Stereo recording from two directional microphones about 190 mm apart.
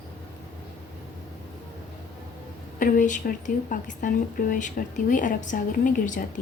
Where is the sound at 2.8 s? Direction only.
45° left (ahead or behind).